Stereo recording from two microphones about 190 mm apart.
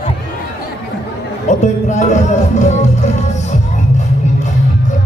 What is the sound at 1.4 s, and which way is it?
Music, 40° left (ahead or behind).